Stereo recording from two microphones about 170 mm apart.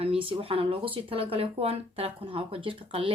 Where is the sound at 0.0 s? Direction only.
35° right (ahead or behind).